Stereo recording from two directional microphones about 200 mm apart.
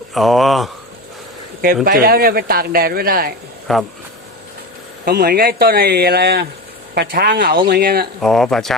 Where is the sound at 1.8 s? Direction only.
45° right (ahead or behind).